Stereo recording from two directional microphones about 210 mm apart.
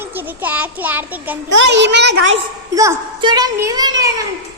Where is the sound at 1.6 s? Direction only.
55° right (ahead or behind).